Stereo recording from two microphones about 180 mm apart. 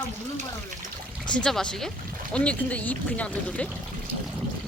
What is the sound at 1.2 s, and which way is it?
Speech, 5° left (ahead or behind).